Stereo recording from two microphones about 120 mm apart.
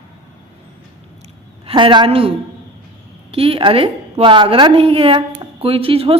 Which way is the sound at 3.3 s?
50° right (ahead or behind).